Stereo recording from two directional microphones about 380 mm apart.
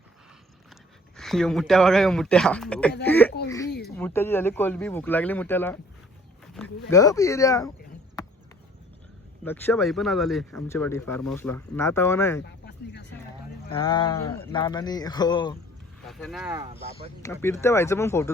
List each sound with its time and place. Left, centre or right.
1.1 s speech: centre
8.2 s a sound: centre
9.4 s speech: centre
12.6 s a sound: left
13.7 s speech: centre
16.0 s speech: centre
17.2 s speech: centre